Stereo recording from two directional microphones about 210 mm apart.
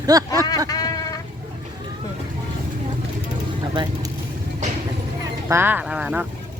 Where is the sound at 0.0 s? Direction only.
15° right (ahead or behind).